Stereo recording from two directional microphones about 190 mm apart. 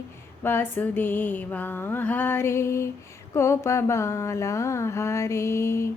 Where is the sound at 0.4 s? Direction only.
10° left (ahead or behind).